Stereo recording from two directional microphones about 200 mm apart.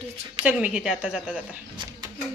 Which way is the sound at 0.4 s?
5° right (ahead or behind).